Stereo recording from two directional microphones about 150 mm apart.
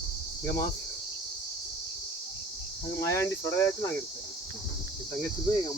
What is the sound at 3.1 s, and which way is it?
Speech, 20° left (ahead or behind).